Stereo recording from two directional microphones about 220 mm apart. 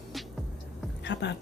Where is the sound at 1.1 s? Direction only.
50° left (ahead or behind).